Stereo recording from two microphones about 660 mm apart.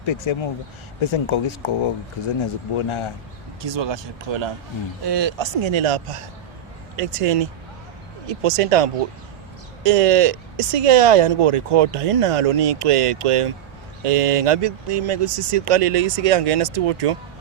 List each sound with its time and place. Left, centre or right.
0.0 s speech: left
2.7 s speech: left
3.6 s speech: right